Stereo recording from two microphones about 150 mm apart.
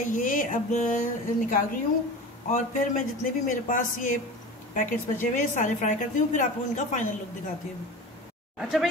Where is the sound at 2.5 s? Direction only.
55° left (ahead or behind).